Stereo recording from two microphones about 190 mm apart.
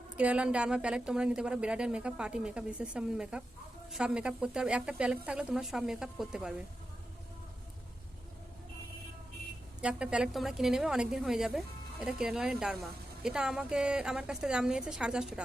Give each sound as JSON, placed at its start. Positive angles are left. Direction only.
{"t": 0.2, "sound": "a woman's voice", "side_deg": -5}
{"t": 9.8, "sound": "a woman's voice", "side_deg": -5}